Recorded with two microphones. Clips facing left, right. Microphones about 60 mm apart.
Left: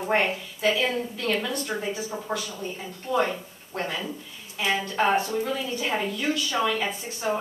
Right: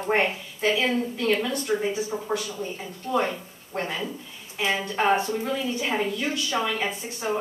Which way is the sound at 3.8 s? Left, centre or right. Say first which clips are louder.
Even; centre.